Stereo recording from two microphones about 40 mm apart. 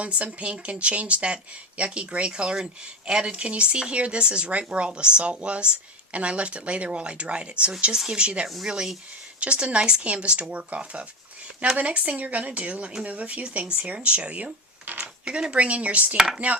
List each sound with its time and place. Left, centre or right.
0.0 s speech: right
15.2 s speech: right
15.5 s speech: right
16.1 s dishes: centre